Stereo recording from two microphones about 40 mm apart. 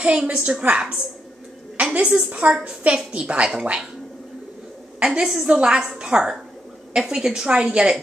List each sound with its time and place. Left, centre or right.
0.0 s a woman's voice: right
2.9 s a woman's voice: right
5.0 s a woman's voice: centre
7.4 s a woman's voice: right